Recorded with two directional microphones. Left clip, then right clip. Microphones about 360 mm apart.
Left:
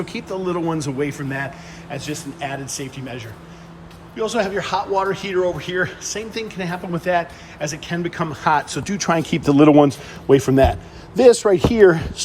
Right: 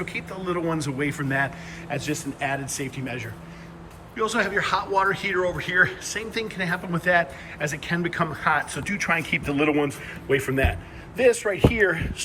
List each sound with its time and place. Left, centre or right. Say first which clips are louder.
0.0 s a man's voice: left 5 dB; centre
11.7 s speech: left 9 dB; left